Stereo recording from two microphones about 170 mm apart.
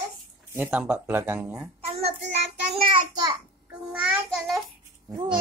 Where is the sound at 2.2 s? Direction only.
90° right.